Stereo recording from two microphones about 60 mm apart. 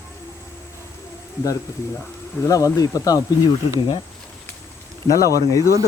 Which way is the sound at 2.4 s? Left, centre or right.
Left.